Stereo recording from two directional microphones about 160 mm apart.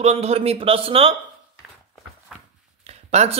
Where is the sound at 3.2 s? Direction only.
45° right (ahead or behind).